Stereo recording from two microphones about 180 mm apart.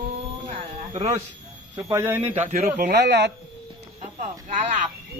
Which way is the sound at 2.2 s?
40° right (ahead or behind).